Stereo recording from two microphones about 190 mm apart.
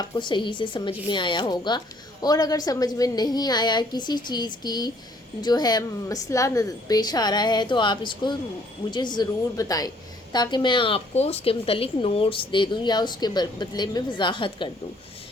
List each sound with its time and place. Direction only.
0.0 s a woman's voice: 25° left (ahead or behind)